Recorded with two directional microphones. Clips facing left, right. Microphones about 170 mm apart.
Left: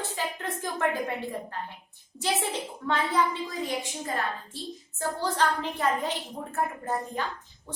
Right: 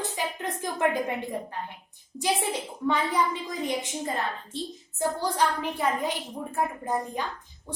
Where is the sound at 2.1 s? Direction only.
15° right (ahead or behind).